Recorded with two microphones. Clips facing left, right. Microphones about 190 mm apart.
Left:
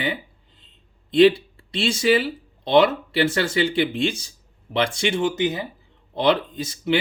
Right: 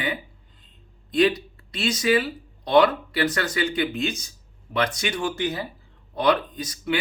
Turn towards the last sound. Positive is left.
turn(degrees=25)  # may be behind; listen again after turning